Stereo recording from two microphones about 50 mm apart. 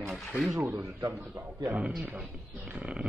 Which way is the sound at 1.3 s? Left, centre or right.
Right.